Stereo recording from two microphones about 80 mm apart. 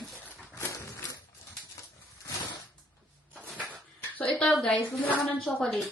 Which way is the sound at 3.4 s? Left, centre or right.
Centre.